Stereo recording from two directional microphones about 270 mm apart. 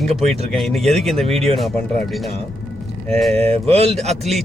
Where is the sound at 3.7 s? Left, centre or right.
Right.